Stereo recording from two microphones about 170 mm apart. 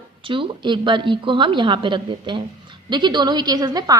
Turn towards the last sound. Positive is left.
turn(degrees=-20)  # may be behind; listen again after turning